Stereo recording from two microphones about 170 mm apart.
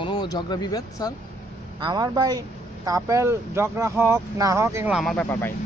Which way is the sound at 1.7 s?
25° right (ahead or behind).